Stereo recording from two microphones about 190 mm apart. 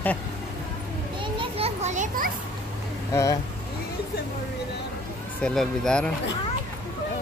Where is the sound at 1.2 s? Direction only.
30° right (ahead or behind).